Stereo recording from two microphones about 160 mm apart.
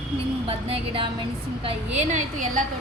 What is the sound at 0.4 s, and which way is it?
Speech, 35° right (ahead or behind).